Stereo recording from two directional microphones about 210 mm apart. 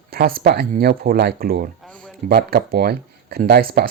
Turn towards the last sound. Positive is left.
turn(degrees=-45)  # may be behind; listen again after turning